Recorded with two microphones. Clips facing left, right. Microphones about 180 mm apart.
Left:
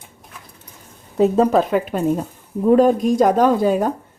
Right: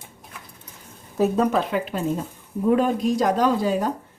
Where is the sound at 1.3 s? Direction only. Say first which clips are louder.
Left 6 dB; 40° left (ahead or behind).